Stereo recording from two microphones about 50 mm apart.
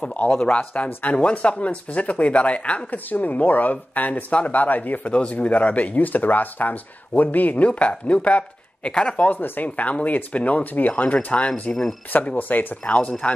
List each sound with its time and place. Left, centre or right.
0.0 s speech: left
9.3 s speech: left